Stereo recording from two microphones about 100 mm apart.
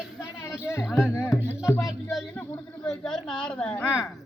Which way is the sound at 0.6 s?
30° left (ahead or behind).